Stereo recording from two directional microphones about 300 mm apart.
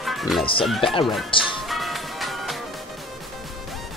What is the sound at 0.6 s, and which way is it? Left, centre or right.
Speech, centre.